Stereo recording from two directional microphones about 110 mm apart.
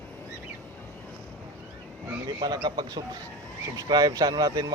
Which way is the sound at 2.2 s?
40° right (ahead or behind).